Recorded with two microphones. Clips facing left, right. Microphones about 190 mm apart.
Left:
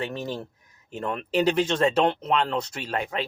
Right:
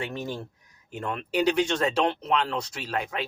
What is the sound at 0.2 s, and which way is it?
Speech, 20° left (ahead or behind).